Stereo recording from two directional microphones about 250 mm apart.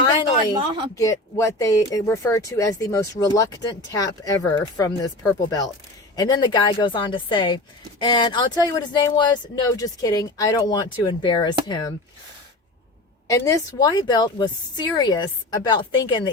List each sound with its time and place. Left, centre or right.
0.5 s a woman's voice: centre
0.9 s speech: centre
13.3 s speech: centre